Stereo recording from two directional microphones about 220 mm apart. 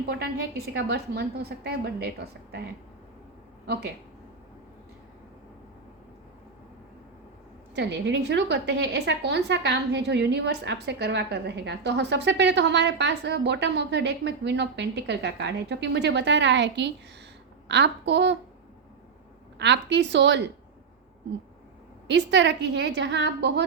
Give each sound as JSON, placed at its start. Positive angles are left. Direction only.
{"t": 0.0, "sound": "a woman's voice", "side_deg": -45}
{"t": 7.8, "sound": "a woman's voice", "side_deg": -50}
{"t": 19.5, "sound": "a woman's voice", "side_deg": -50}
{"t": 22.0, "sound": "a woman's voice", "side_deg": -50}